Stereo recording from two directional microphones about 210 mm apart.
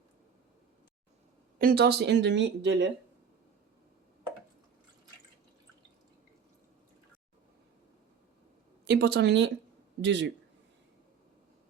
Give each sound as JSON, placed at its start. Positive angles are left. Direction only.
{"t": 1.5, "sound": "speech", "side_deg": -45}
{"t": 8.9, "sound": "speech", "side_deg": -50}